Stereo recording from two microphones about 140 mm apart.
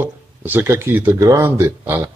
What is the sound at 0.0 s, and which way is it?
A man's voice, 15° right (ahead or behind).